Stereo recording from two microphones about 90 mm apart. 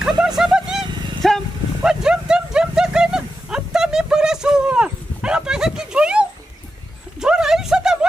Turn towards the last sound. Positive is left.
turn(degrees=-5)  # may be behind; listen again after turning